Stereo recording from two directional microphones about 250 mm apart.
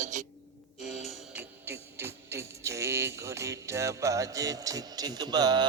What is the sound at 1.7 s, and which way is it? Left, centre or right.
Music, centre.